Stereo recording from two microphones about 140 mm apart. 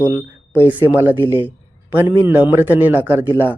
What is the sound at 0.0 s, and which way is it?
Speech, 10° right (ahead or behind).